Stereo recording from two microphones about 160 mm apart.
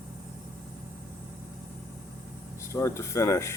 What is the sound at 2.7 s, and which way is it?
Speech, 20° left (ahead or behind).